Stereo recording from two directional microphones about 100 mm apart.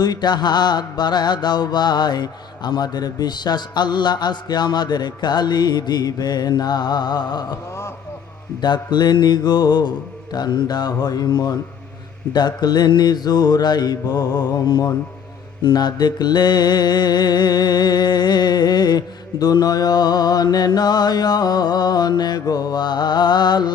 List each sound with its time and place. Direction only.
0.0 s mantra: 45° left (ahead or behind)
8.6 s mantra: 50° left (ahead or behind)